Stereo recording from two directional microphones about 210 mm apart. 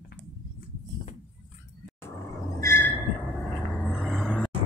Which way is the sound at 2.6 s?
10° left (ahead or behind).